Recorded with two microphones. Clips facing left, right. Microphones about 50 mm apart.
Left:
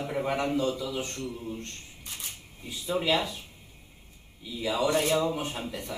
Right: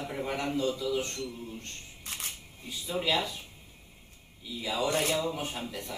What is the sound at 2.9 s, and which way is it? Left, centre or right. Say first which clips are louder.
Speech: left 2 dB; centre.